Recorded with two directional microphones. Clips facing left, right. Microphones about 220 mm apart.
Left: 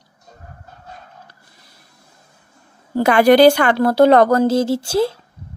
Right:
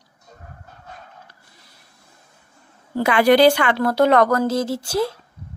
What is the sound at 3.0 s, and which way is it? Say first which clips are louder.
Speech: left 4 dB; 45° left (ahead or behind).